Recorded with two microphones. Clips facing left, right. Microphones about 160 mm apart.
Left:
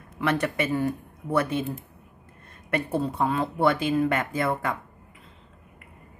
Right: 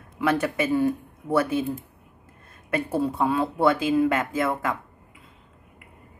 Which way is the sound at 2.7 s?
5° right (ahead or behind).